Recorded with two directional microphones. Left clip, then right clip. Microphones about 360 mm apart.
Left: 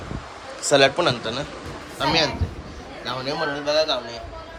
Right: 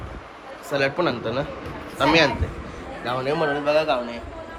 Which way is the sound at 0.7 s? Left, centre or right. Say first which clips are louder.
Left 5 dB; centre.